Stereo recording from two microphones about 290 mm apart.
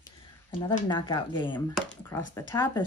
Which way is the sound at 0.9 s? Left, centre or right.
Centre.